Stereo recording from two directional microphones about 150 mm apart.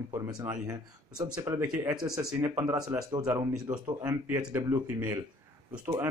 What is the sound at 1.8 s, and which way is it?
Speech, 5° right (ahead or behind).